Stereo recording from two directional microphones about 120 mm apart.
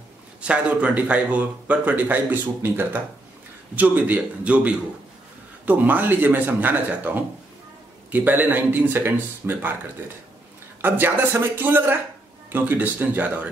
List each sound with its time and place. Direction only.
0.4 s a man's voice: 10° right (ahead or behind)
8.1 s a man's voice: 15° right (ahead or behind)
10.8 s a man's voice: 15° right (ahead or behind)